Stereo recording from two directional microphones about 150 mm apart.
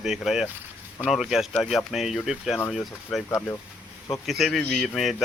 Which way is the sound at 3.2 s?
20° left (ahead or behind).